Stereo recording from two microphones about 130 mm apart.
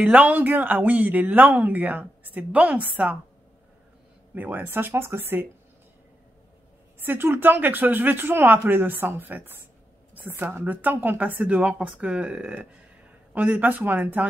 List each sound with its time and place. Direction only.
0.0 s speech: 10° right (ahead or behind)
4.4 s speech: 15° right (ahead or behind)
7.1 s speech: 15° right (ahead or behind)